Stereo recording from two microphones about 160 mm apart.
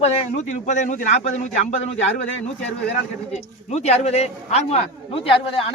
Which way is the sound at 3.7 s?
40° left (ahead or behind).